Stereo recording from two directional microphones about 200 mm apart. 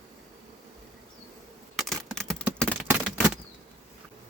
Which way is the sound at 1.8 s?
Centre (ahead or behind).